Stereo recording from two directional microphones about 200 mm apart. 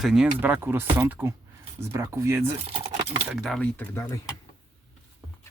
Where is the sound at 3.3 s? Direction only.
Centre (ahead or behind).